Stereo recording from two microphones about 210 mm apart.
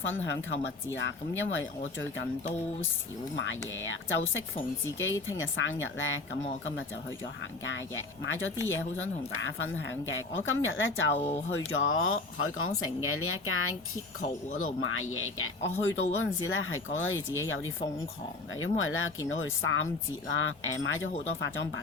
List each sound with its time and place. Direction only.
0.0 s speech: 60° left (ahead or behind)
3.3 s speech: 65° left (ahead or behind)
7.6 s speech: 60° left (ahead or behind)
11.2 s speech: 30° left (ahead or behind)
11.5 s speech: 65° left (ahead or behind)